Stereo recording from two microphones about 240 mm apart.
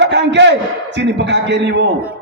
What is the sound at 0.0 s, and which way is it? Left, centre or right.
A man's voice, right.